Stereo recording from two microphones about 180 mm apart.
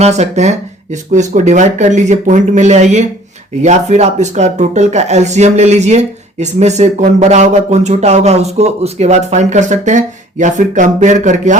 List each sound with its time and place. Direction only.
0.0 s speech: 40° right (ahead or behind)